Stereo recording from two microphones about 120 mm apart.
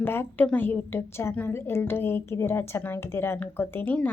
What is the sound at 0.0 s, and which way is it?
A woman's voice, 20° left (ahead or behind).